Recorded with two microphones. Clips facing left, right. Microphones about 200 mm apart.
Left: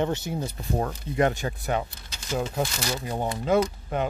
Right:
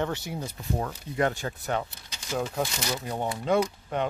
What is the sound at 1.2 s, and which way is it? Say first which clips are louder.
Speech: left 3 dB; 20° left (ahead or behind).